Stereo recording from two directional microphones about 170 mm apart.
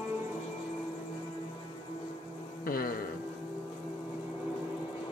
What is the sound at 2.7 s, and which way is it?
Music, 60° left (ahead or behind).